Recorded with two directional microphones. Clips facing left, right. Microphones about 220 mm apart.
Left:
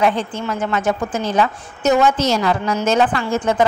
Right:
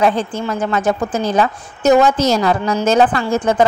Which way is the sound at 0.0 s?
35° right (ahead or behind).